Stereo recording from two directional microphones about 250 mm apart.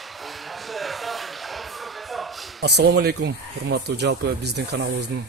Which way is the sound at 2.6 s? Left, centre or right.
Right.